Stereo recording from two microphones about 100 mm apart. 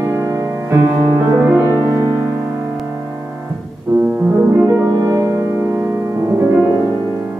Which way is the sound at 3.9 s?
35° right (ahead or behind).